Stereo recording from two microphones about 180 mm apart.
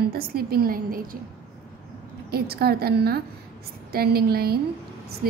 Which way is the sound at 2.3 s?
60° right (ahead or behind).